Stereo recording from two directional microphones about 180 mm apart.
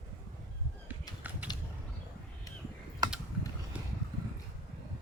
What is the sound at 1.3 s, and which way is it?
Mechanisms, 10° right (ahead or behind).